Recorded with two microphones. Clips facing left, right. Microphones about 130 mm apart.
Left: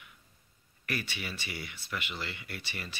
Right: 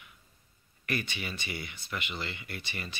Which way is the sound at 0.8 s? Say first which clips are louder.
Right 2 dB; 5° left (ahead or behind).